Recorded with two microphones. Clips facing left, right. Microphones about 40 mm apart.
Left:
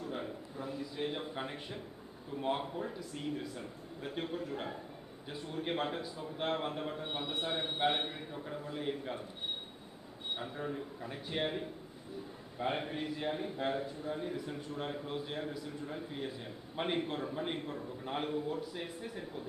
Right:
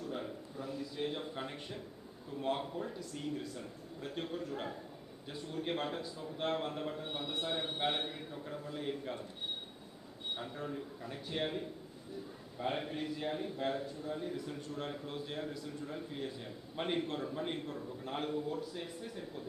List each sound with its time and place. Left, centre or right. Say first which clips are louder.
0.1 s a sound: left 1 dB; centre
2.4 s a man's voice: left 1 dB; centre
10.3 s a man's voice: left 3 dB; centre